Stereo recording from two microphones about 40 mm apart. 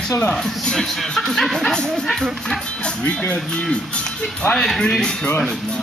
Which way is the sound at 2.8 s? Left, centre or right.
Left.